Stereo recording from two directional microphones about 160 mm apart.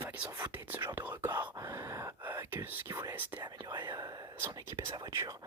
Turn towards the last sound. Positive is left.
turn(degrees=-20)  # may be behind; listen again after turning